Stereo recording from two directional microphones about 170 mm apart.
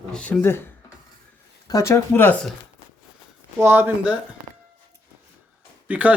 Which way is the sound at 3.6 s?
10° right (ahead or behind).